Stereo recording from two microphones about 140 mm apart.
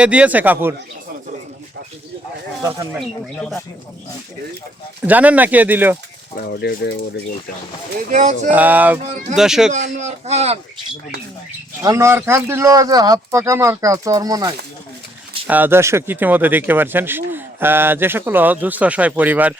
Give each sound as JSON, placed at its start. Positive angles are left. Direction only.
{"t": 0.0, "sound": "speech", "side_deg": -10}
{"t": 5.0, "sound": "speech", "side_deg": -10}
{"t": 8.1, "sound": "speech", "side_deg": -70}
{"t": 8.4, "sound": "speech", "side_deg": -10}
{"t": 9.7, "sound": "speech", "side_deg": -60}
{"t": 11.8, "sound": "speech", "side_deg": -20}
{"t": 15.4, "sound": "speech", "side_deg": -15}